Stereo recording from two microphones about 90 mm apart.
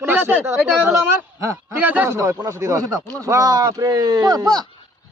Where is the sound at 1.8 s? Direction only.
15° right (ahead or behind).